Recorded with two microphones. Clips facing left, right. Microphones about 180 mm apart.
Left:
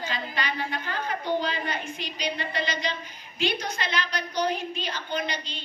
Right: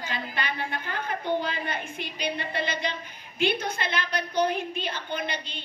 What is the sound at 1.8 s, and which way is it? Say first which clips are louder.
A woman's voice: even; 55° right (ahead or behind).